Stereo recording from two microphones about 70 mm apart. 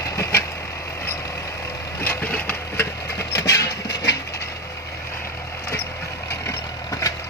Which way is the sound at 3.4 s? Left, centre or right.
Left.